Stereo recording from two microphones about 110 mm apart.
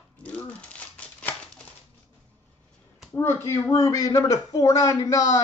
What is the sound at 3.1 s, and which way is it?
Speech, 25° left (ahead or behind).